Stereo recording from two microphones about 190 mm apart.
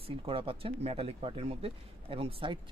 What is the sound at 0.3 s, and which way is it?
Speech, 30° right (ahead or behind).